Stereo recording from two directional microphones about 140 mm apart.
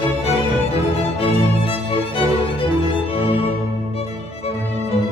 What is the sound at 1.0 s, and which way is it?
Music, 40° left (ahead or behind).